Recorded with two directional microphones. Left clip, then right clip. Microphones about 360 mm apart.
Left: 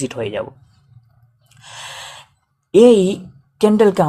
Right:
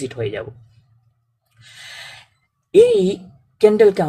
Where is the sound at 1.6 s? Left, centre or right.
Centre.